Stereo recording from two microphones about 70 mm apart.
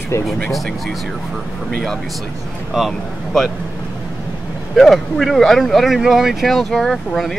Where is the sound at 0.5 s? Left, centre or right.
Centre.